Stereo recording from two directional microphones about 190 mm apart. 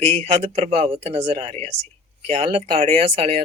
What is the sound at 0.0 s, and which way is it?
Speech, 30° right (ahead or behind).